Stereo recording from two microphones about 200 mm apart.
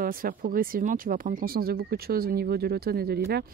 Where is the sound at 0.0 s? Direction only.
45° right (ahead or behind).